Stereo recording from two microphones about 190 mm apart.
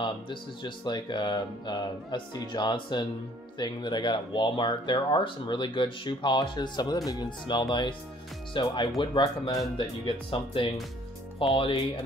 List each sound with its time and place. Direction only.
0.0 s speech: 25° left (ahead or behind)